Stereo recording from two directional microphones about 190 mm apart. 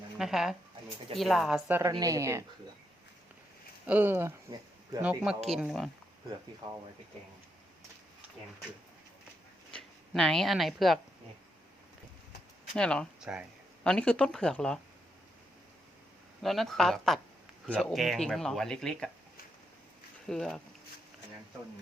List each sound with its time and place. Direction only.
0.2 s a woman's voice: centre (ahead or behind)
3.8 s a woman's voice: 10° right (ahead or behind)
9.7 s speech: 5° left (ahead or behind)
12.7 s speech: 5° left (ahead or behind)
16.4 s speech: centre (ahead or behind)
20.2 s speech: 5° left (ahead or behind)